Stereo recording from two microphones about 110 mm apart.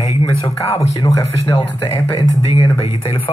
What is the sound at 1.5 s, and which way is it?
Speech, 55° left (ahead or behind).